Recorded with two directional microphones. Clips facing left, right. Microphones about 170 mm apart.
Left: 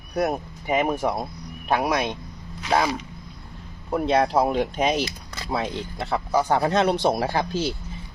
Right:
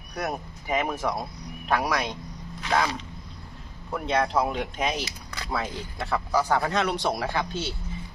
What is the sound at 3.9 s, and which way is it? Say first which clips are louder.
Speech: left 5 dB; 30° left (ahead or behind).